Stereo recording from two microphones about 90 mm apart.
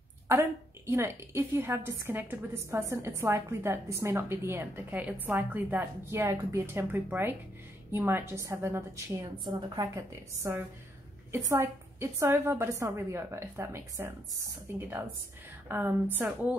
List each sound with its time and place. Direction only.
0.3 s a woman's voice: 30° right (ahead or behind)
9.2 s a woman's voice: 45° right (ahead or behind)
9.9 s a woman's voice: 35° right (ahead or behind)
15.7 s a woman's voice: 25° right (ahead or behind)